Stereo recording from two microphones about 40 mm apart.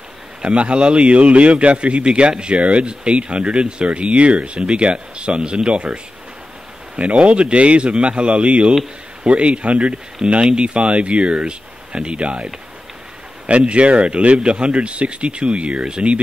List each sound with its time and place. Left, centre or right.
0.4 s a man's voice: right
7.0 s a man's voice: right
13.5 s speech: right